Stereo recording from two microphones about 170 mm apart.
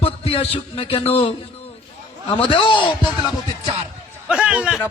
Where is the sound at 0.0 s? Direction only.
35° left (ahead or behind).